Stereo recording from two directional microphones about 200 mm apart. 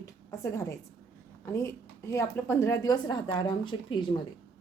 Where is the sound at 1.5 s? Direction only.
15° left (ahead or behind).